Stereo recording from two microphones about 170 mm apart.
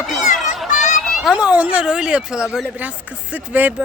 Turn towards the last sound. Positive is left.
turn(degrees=-10)  # may be behind; listen again after turning